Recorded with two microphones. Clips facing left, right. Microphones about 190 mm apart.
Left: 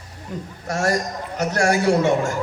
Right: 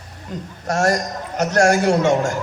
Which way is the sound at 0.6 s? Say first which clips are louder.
Right 3 dB; 45° right (ahead or behind).